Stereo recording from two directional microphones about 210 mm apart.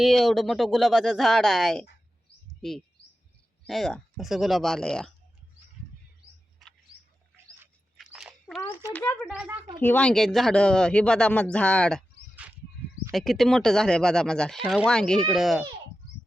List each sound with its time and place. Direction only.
0.0 s speech: centre (ahead or behind)
7.6 s dog: 5° right (ahead or behind)
8.9 s speech: 5° left (ahead or behind)
9.3 s speech: 5° right (ahead or behind)
9.8 s speech: 5° left (ahead or behind)